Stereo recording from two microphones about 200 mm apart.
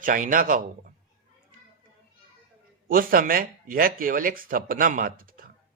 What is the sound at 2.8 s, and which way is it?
Speech, 45° right (ahead or behind).